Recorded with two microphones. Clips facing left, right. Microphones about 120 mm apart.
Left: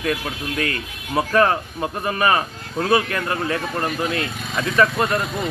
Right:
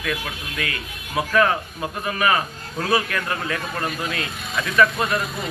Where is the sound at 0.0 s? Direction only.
35° left (ahead or behind).